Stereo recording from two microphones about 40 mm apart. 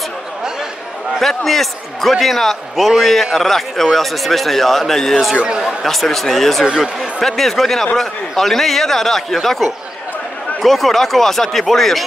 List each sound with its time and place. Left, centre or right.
1.2 s speech: centre
5.3 s speech: right
5.9 s speech: centre